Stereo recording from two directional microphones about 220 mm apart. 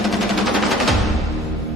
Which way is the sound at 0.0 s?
Centre (ahead or behind).